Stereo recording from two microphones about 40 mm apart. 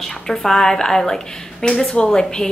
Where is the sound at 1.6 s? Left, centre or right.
Left.